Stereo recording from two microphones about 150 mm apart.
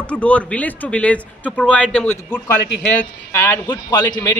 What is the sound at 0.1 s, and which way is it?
A man's voice, 10° left (ahead or behind).